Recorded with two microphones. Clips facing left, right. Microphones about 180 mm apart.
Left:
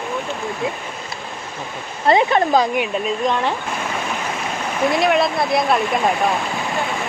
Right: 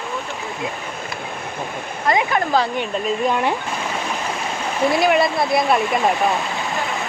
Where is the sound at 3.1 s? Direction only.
10° right (ahead or behind).